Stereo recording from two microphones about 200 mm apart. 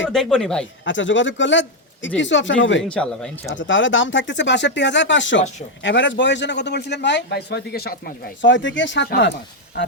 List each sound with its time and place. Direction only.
0.1 s speech: 5° left (ahead or behind)
0.9 s speech: 70° left (ahead or behind)
2.9 s speech: 5° left (ahead or behind)
3.5 s a man's voice: 70° left (ahead or behind)